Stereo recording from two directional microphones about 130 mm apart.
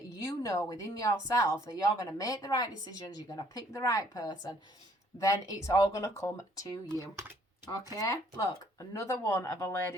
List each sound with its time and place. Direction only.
0.3 s speech: 25° left (ahead or behind)